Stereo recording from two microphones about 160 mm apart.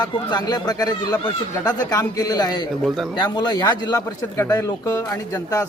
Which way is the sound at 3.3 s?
25° left (ahead or behind).